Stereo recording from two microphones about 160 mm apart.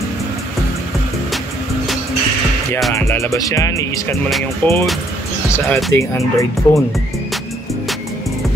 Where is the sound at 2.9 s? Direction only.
20° left (ahead or behind).